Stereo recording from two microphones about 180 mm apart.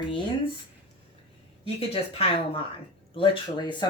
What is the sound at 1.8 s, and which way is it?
Speech, 30° left (ahead or behind).